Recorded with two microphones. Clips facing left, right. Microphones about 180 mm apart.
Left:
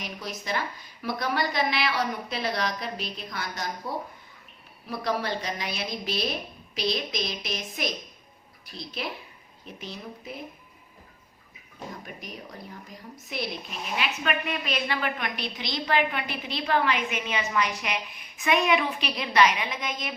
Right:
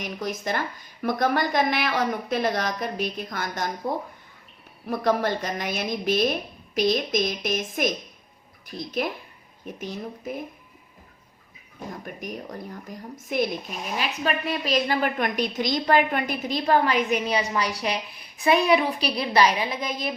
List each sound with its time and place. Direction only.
0.0 s a woman's voice: 50° right (ahead or behind)
11.9 s a woman's voice: 50° right (ahead or behind)